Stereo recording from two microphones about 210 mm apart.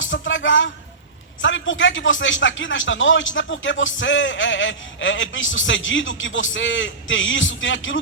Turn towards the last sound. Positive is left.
turn(degrees=65)  # may be behind; listen again after turning